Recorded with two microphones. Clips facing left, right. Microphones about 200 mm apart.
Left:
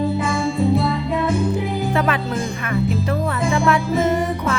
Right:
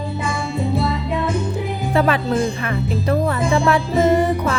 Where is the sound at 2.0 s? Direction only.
30° right (ahead or behind).